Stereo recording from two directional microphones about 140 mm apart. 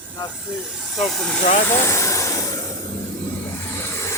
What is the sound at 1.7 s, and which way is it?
Vehicle, 20° left (ahead or behind).